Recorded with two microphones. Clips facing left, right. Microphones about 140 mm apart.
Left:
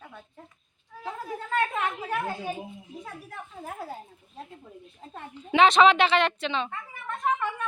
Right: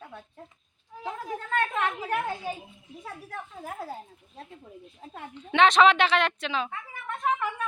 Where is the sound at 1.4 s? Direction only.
5° left (ahead or behind).